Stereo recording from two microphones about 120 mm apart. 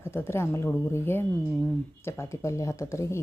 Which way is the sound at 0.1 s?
20° left (ahead or behind).